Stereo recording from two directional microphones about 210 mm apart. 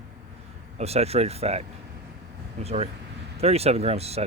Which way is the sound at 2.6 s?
30° right (ahead or behind).